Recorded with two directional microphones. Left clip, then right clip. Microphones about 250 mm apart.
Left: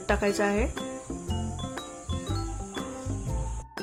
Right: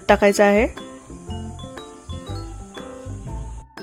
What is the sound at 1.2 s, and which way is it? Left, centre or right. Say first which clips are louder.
Music: even; centre.